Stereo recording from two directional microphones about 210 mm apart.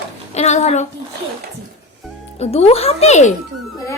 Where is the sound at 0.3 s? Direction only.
30° left (ahead or behind).